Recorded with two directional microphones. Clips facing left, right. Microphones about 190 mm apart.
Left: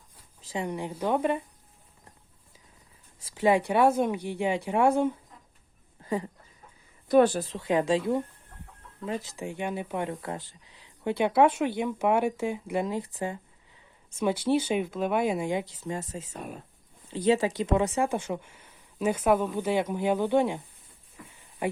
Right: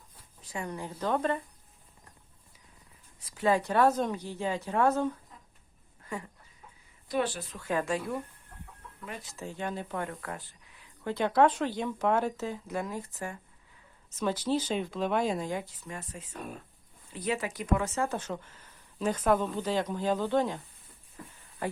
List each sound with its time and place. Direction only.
0.5 s speech: 15° left (ahead or behind)
3.2 s a sound: 20° left (ahead or behind)
3.7 s speech: 10° left (ahead or behind)
6.0 s a sound: 30° left (ahead or behind)
7.1 s speech: 45° left (ahead or behind)
7.6 s speech: 20° left (ahead or behind)
9.3 s speech: 15° left (ahead or behind)
15.9 s speech: 25° left (ahead or behind)